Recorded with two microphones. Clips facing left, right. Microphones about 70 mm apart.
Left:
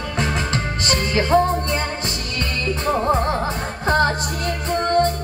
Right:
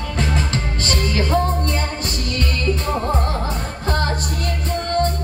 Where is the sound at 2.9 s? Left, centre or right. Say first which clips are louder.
Left 3 dB; left.